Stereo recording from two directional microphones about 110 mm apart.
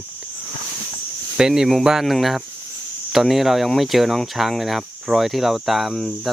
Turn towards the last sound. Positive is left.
turn(degrees=0)  # may be behind; listen again after turning